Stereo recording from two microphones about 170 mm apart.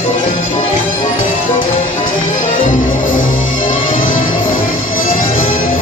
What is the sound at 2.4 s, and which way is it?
Music, 50° left (ahead or behind).